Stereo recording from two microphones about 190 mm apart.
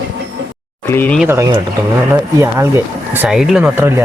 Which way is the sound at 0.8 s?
10° left (ahead or behind).